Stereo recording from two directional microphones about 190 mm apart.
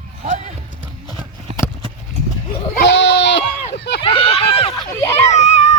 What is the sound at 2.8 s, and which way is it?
Goat, 70° left (ahead or behind).